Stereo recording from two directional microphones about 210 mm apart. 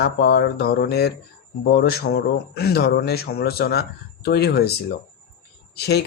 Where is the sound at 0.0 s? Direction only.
50° left (ahead or behind).